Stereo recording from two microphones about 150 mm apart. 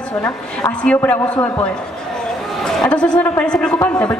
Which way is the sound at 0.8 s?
10° left (ahead or behind).